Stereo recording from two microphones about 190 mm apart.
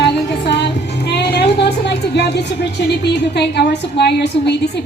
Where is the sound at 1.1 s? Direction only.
60° left (ahead or behind).